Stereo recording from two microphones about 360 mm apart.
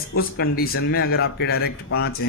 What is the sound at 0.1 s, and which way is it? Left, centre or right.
A man's voice, left.